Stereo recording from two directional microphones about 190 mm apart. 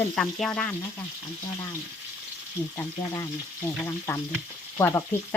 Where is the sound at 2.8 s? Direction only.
15° left (ahead or behind).